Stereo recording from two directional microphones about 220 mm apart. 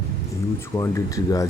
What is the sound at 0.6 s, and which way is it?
Speech, 10° left (ahead or behind).